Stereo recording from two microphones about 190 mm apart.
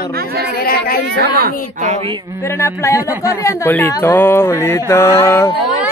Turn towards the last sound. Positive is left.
turn(degrees=15)  # may be behind; listen again after turning